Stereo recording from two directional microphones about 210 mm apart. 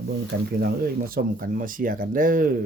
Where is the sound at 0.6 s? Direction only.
45° right (ahead or behind).